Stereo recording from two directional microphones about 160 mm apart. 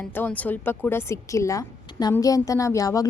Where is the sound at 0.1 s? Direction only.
10° left (ahead or behind).